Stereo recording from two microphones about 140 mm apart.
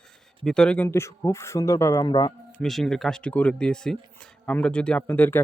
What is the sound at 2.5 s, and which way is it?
Speech, centre (ahead or behind).